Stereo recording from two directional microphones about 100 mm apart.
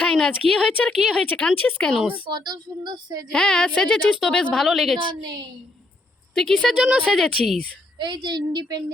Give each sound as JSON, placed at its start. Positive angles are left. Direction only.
{"t": 0.0, "sound": "a woman's voice", "side_deg": 5}
{"t": 2.3, "sound": "a woman's voice", "side_deg": -45}
{"t": 3.3, "sound": "a woman's voice", "side_deg": 5}
{"t": 5.0, "sound": "a woman's voice", "side_deg": -45}
{"t": 6.3, "sound": "speech", "side_deg": 5}
{"t": 6.7, "sound": "speech", "side_deg": -10}
{"t": 7.1, "sound": "speech", "side_deg": 0}
{"t": 7.9, "sound": "a woman's voice", "side_deg": -50}